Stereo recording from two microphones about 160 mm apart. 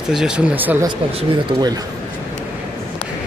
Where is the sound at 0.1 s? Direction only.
5° right (ahead or behind).